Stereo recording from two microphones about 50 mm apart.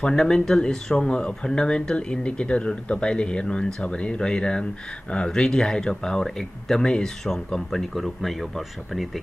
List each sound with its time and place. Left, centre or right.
0.0 s speech: centre